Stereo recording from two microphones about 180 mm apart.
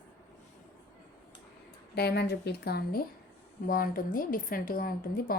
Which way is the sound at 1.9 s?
65° left (ahead or behind).